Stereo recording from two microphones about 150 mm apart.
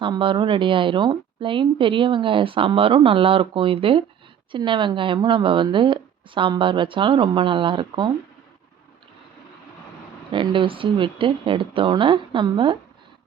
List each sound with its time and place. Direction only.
0.0 s a woman's voice: 35° right (ahead or behind)
10.3 s a woman's voice: 35° right (ahead or behind)